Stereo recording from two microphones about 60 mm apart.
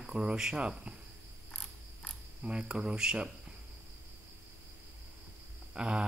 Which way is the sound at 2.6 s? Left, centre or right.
Centre.